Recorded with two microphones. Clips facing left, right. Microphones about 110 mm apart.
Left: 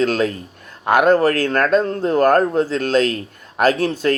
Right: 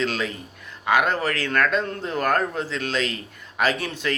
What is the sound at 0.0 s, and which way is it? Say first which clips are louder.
Speech: left 8 dB; 45° left (ahead or behind).